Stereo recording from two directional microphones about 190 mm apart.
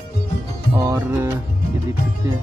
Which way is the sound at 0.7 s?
15° right (ahead or behind).